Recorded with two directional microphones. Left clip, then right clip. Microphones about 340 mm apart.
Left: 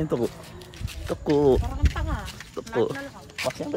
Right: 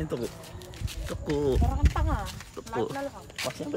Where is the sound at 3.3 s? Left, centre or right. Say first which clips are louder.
Left 6 dB; centre.